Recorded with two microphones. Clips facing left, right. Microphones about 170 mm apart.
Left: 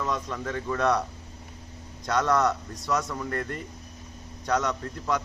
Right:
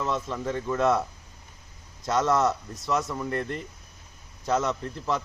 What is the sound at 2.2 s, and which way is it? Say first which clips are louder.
Speech: even; 25° right (ahead or behind).